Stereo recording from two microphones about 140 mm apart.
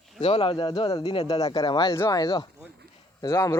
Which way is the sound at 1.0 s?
45° left (ahead or behind).